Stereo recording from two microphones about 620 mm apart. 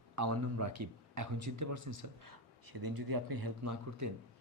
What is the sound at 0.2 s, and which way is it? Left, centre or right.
Speech, right.